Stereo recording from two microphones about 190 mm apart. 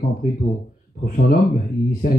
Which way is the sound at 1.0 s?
45° left (ahead or behind).